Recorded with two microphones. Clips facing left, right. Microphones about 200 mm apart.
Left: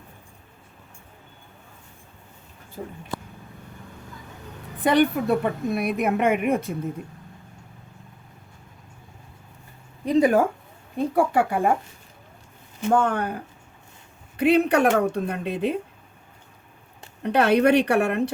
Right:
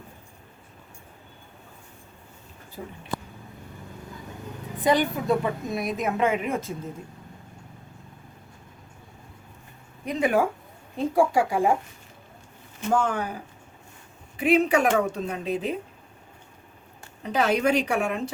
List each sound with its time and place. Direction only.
4.8 s a woman's voice: 60° left (ahead or behind)
10.1 s speech: 40° left (ahead or behind)
11.1 s a woman's voice: 60° left (ahead or behind)
12.9 s a woman's voice: 60° left (ahead or behind)
17.2 s a woman's voice: 65° left (ahead or behind)